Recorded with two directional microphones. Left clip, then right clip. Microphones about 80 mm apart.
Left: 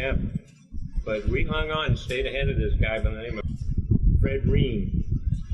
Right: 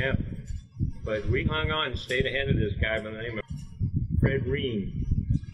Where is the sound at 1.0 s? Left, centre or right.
Right.